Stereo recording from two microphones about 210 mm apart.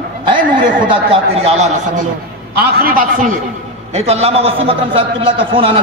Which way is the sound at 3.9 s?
30° right (ahead or behind).